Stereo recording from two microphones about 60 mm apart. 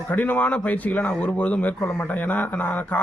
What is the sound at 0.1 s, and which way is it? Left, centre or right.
Speech, left.